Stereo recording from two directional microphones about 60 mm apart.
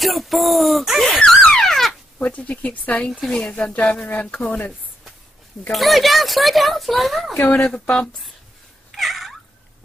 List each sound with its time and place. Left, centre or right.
0.0 s a sound: centre
2.1 s speech: left
3.1 s speech: centre; by 4.7 s left
5.7 s speech: centre
7.5 s speech: centre
8.9 s cat: centre